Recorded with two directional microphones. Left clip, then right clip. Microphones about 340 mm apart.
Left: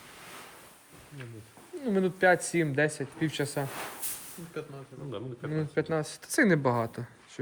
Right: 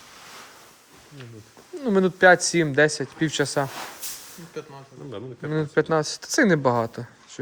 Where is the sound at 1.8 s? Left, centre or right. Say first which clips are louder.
Right 8 dB; centre.